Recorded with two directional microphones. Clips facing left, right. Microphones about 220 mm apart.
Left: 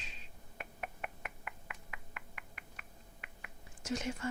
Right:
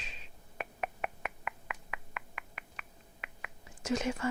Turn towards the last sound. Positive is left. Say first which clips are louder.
# right 5 dB
turn(degrees=-90)